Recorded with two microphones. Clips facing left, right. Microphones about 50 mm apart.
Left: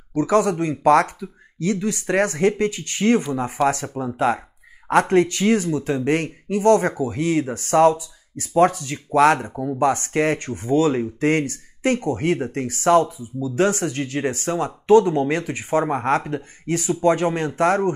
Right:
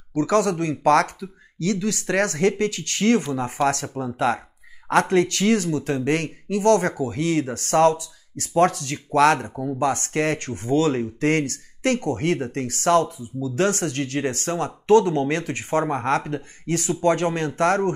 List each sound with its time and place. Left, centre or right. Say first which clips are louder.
0.1 s speech: left 2 dB; left